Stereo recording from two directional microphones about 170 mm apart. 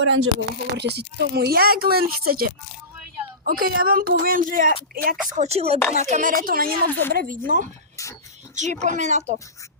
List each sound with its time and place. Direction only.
0.1 s speech: 80° right; by 4.7 s 55° right (ahead or behind)
5.3 s speech: 40° right (ahead or behind)